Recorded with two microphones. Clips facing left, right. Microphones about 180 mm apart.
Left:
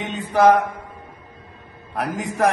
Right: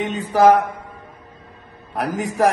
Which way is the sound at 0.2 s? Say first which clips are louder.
Right 1 dB; 35° right (ahead or behind).